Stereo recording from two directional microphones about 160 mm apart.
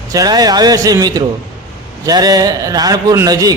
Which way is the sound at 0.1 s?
25° right (ahead or behind).